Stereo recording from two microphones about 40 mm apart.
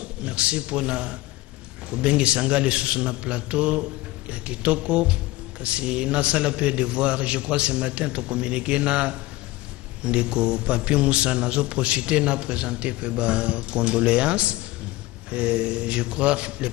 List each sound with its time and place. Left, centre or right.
0.0 s a man's voice: right